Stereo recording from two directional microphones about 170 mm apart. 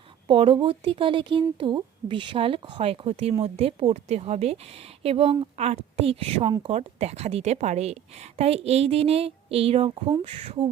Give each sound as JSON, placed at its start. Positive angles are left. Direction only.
{"t": 0.3, "sound": "a woman's voice", "side_deg": -30}